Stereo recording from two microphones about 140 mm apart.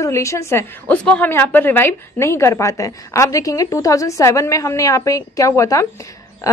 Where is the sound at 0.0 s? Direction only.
20° left (ahead or behind).